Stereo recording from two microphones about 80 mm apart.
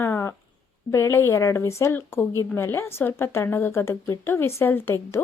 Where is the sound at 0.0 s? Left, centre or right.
Left.